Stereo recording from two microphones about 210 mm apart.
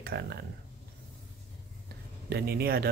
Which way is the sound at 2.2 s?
50° right (ahead or behind).